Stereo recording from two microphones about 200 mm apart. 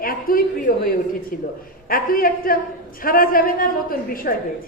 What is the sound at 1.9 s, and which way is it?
A man's voice, 45° left (ahead or behind).